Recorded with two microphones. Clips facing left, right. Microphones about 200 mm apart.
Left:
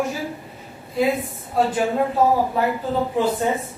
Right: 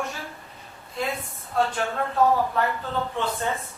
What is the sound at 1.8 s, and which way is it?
Speech, 15° left (ahead or behind).